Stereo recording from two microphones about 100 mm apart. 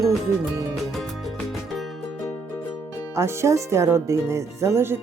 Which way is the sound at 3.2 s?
30° right (ahead or behind).